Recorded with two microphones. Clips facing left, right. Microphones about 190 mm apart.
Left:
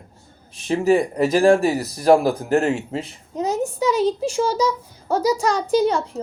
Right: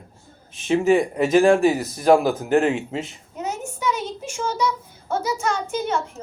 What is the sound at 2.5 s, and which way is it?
A child's voice, 30° left (ahead or behind).